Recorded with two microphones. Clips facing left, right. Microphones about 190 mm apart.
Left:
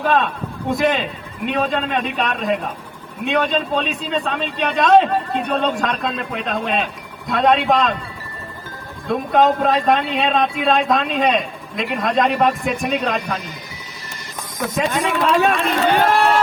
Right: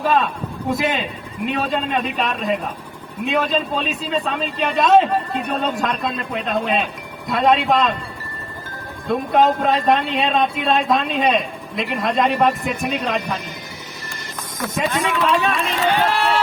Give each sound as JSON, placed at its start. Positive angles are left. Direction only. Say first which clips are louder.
{"t": 0.0, "sound": "a man's voice", "louder": "even", "side_deg": 0}
{"t": 9.0, "sound": "a man's voice", "louder": "left 1 dB", "side_deg": 0}
{"t": 14.9, "sound": "speech", "louder": "left 2 dB", "side_deg": 50}